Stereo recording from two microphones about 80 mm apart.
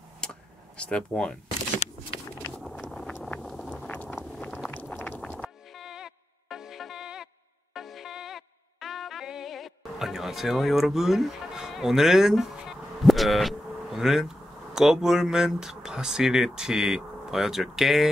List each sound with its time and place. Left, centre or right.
0.2 s a sound: centre
2.3 s vehicle: centre
3.8 s vehicle: centre
5.2 s vehicle: centre
5.8 s music: centre